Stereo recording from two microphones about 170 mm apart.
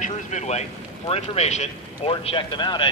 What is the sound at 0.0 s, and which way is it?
Speech, 45° left (ahead or behind).